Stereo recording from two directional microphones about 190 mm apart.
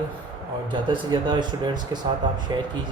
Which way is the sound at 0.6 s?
25° right (ahead or behind).